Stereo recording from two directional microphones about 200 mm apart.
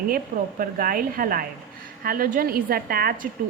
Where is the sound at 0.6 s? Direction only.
45° right (ahead or behind).